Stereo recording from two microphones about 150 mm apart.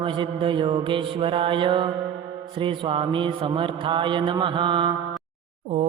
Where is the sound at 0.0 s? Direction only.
35° right (ahead or behind).